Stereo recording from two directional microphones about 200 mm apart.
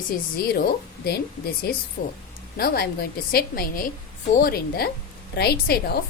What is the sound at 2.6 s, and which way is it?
A woman's voice, 50° left (ahead or behind).